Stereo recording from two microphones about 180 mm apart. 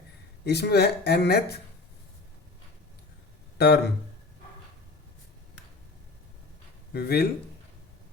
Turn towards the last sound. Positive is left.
turn(degrees=65)  # may be behind; listen again after turning